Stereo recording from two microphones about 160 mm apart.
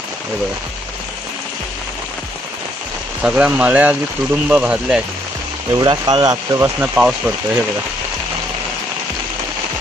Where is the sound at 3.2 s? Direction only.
10° right (ahead or behind).